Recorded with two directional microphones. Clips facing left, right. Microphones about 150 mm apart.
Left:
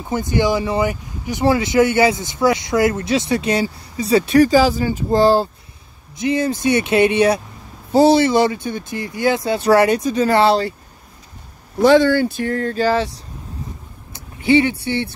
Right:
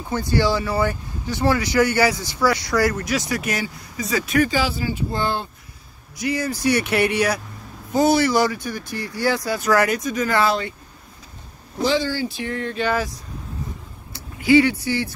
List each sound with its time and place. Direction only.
0.1 s speech: 20° left (ahead or behind); by 5.5 s 35° left (ahead or behind)
6.1 s speech: 25° left (ahead or behind)
11.8 s speech: 55° left (ahead or behind); by 13.1 s 30° left (ahead or behind)
14.1 s speech: 25° left (ahead or behind)